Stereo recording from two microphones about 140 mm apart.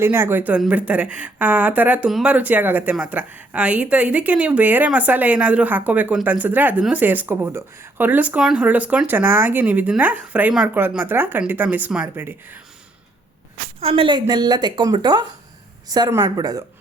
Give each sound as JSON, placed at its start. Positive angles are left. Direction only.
{"t": 0.0, "sound": "speech", "side_deg": -15}
{"t": 13.7, "sound": "a woman's voice", "side_deg": -45}